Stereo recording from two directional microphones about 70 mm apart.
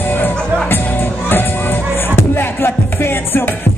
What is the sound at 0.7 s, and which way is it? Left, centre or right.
Music, left.